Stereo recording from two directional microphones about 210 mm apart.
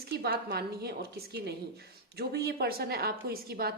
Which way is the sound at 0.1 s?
50° right (ahead or behind).